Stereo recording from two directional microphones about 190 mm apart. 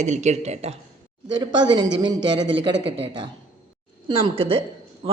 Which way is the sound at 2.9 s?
30° right (ahead or behind).